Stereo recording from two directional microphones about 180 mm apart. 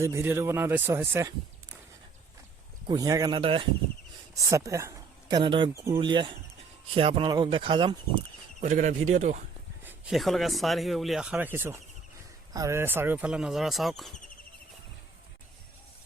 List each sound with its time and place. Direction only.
0.0 s speech: 15° right (ahead or behind)
2.8 s speech: 20° right (ahead or behind)
4.4 s speech: 15° right (ahead or behind)
8.6 s speech: 45° right (ahead or behind)
9.8 s speech: centre (ahead or behind)